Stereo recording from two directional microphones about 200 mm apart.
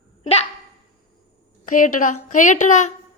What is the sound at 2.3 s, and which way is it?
Speech, 40° left (ahead or behind).